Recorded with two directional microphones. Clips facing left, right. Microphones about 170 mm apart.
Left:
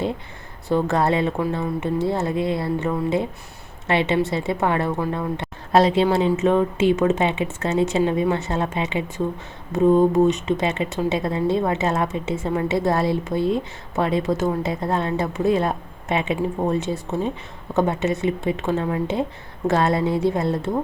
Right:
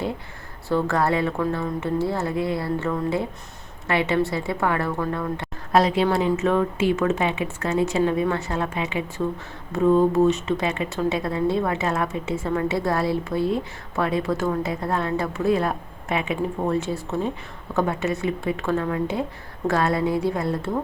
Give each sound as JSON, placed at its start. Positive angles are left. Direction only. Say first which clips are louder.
{"t": 0.7, "sound": "a woman's voice", "louder": "left 2 dB", "side_deg": 20}